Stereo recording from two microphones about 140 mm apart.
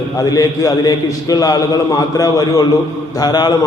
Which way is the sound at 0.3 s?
25° left (ahead or behind).